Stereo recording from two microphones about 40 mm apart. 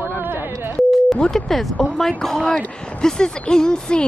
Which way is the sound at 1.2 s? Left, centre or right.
Centre.